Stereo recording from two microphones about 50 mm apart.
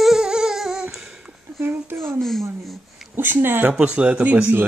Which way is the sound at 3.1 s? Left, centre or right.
Right.